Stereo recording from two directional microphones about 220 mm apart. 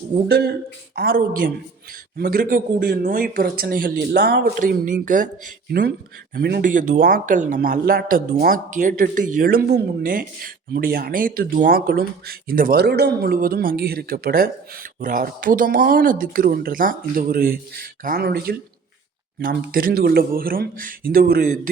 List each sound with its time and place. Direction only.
0.3 s a woman's voice: 45° right (ahead or behind)